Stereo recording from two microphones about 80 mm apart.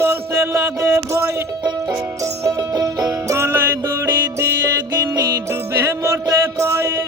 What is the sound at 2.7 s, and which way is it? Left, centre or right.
Music, right.